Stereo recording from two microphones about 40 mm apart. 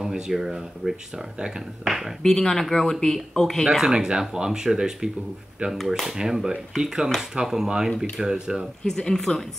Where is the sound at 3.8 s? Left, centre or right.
Right.